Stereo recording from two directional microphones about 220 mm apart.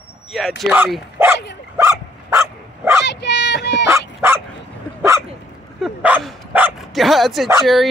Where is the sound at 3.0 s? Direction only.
50° left (ahead or behind).